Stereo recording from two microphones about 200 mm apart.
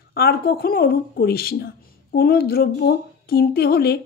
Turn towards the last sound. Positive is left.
turn(degrees=50)  # may be behind; listen again after turning